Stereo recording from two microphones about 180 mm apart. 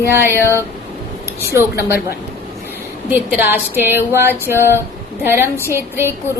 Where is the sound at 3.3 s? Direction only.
10° right (ahead or behind).